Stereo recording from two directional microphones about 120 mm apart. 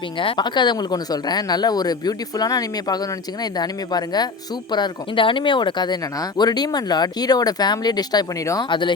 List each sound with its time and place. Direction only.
0.2 s speech: 40° left (ahead or behind)